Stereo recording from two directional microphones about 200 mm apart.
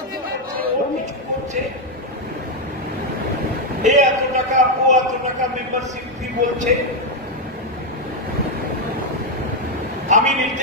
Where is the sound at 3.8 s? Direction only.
35° right (ahead or behind).